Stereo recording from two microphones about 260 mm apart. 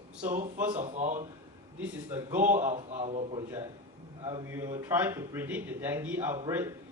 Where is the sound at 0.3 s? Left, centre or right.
Right.